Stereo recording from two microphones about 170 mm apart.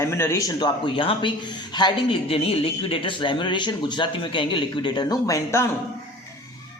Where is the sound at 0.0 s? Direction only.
15° left (ahead or behind).